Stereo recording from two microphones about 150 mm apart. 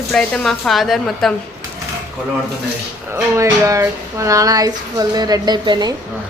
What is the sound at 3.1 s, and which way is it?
Speech, 20° right (ahead or behind).